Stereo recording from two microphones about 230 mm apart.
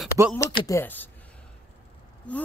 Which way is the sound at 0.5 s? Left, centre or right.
Centre.